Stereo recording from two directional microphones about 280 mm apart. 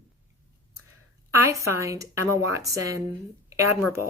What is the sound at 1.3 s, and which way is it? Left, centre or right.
Speech, centre.